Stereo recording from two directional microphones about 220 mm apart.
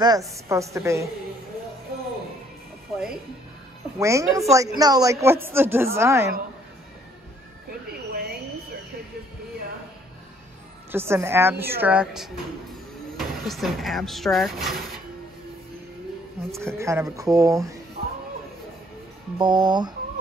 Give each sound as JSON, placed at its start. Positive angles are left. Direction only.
{"t": 0.0, "sound": "a woman's voice", "side_deg": -15}
{"t": 4.0, "sound": "a woman's voice", "side_deg": -15}
{"t": 8.1, "sound": "a sound", "side_deg": -45}
{"t": 10.9, "sound": "a woman's voice", "side_deg": -10}
{"t": 16.5, "sound": "a woman's voice", "side_deg": -15}
{"t": 19.3, "sound": "speech", "side_deg": -20}